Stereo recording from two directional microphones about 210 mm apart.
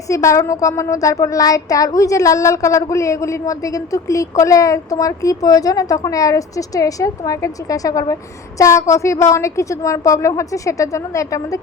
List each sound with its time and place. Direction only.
0.1 s speech: 15° left (ahead or behind)